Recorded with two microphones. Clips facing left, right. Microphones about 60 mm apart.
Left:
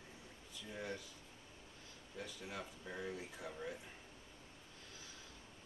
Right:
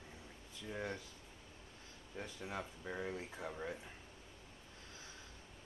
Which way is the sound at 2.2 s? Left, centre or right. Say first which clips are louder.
Right 3 dB; right.